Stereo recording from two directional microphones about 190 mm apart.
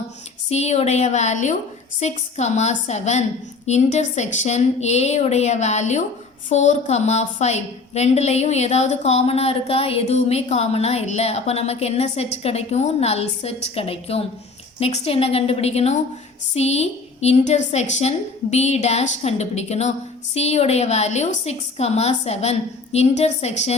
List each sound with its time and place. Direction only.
0.5 s a woman's voice: 35° left (ahead or behind)